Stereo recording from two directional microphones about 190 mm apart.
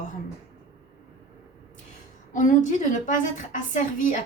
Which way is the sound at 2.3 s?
40° left (ahead or behind).